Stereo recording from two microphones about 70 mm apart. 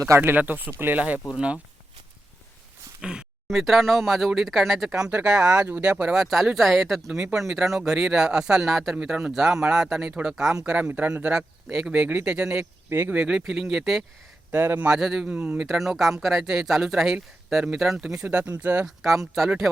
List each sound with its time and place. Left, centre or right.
0.2 s speech: right
3.0 s speech: centre
6.1 s speech: centre
10.8 s speech: right
12.0 s speech: right
12.3 s speech: centre
12.9 s speech: right
13.1 s speech: centre
14.5 s a man's voice: right
14.9 s speech: centre
15.3 s speech: right
15.6 s speech: centre
18.3 s speech: right
18.9 s speech: centre